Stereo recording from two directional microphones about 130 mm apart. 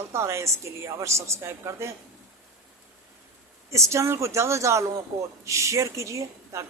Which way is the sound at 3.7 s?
20° right (ahead or behind).